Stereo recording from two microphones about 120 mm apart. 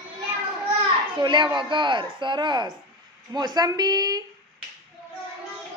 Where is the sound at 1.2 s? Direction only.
40° right (ahead or behind).